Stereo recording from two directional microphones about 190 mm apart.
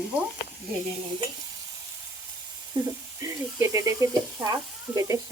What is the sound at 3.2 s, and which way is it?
Speech, 15° right (ahead or behind).